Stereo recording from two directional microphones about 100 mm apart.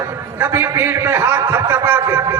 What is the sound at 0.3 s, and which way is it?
Speech, 25° right (ahead or behind).